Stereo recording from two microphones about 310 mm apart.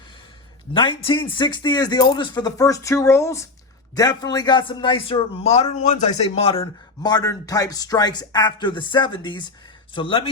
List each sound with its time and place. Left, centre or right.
0.7 s a man's voice: centre